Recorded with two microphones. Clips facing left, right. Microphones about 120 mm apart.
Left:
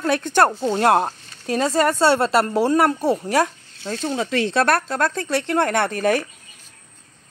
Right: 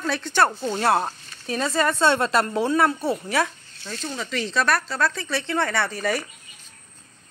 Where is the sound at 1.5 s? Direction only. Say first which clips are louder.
Left 4 dB; 35° left (ahead or behind).